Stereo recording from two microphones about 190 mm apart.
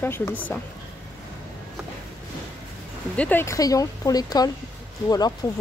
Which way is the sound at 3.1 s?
10° left (ahead or behind).